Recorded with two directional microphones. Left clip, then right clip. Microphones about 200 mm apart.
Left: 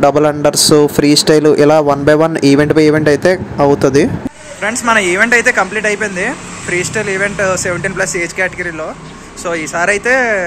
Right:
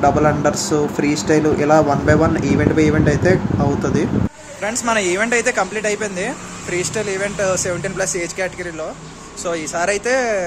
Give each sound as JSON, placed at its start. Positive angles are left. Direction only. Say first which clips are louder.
{"t": 0.0, "sound": "speech", "louder": "left 5 dB", "side_deg": 50}
{"t": 4.6, "sound": "speech", "louder": "left 7 dB", "side_deg": -5}